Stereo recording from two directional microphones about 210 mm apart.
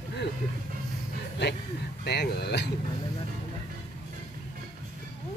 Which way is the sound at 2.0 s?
50° left (ahead or behind).